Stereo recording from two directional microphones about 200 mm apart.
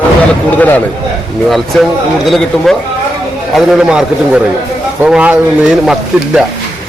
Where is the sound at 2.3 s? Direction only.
Centre (ahead or behind).